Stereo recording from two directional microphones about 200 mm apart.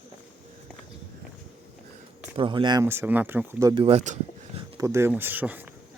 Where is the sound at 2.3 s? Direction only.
25° right (ahead or behind).